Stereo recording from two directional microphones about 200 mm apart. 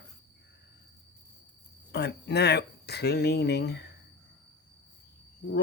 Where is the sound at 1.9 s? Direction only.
55° left (ahead or behind).